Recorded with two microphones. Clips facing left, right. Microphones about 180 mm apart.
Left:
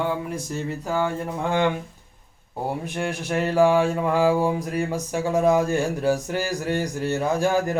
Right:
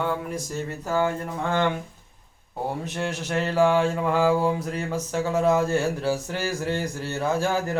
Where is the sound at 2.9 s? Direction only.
10° left (ahead or behind).